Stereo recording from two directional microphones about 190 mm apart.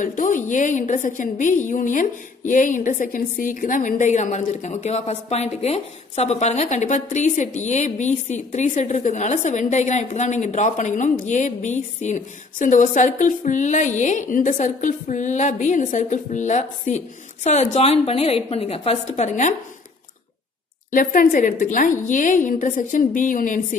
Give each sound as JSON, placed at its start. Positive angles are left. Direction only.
{"t": 0.0, "sound": "a woman's voice", "side_deg": 45}
{"t": 20.9, "sound": "a woman's voice", "side_deg": 45}